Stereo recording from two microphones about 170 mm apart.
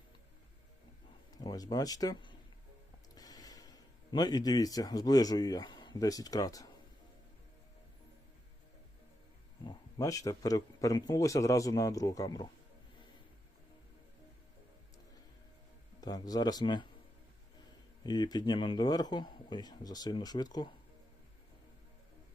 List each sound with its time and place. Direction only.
1.3 s speech: 20° left (ahead or behind)
9.6 s a man's voice: 20° left (ahead or behind)
16.0 s a man's voice: 20° left (ahead or behind)
18.0 s a man's voice: 25° left (ahead or behind)